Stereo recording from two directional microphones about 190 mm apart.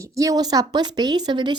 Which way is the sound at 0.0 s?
15° right (ahead or behind).